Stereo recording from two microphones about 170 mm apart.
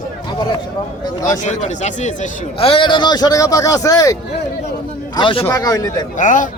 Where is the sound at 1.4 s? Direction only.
45° left (ahead or behind); by 4.1 s 20° left (ahead or behind).